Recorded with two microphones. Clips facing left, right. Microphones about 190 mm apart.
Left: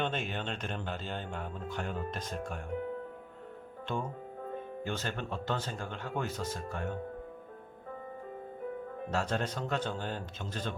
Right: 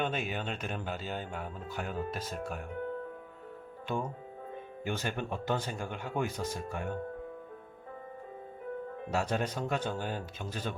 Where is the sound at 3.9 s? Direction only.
10° right (ahead or behind).